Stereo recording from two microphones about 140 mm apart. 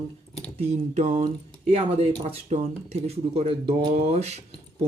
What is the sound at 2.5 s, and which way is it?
Speech, 50° right (ahead or behind).